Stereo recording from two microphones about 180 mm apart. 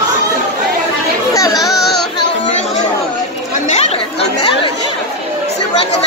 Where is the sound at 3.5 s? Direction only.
40° left (ahead or behind).